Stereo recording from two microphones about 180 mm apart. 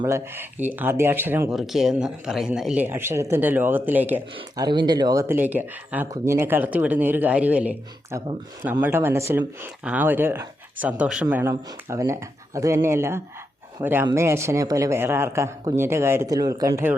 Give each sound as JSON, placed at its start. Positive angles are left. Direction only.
{"t": 0.0, "sound": "speech", "side_deg": -10}
{"t": 1.5, "sound": "speech", "side_deg": 0}
{"t": 4.4, "sound": "speech", "side_deg": -25}